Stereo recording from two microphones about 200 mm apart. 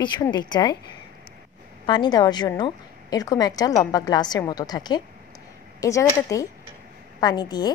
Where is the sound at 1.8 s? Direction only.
20° left (ahead or behind).